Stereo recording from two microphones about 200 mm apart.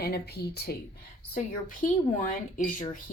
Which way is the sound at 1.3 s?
40° left (ahead or behind).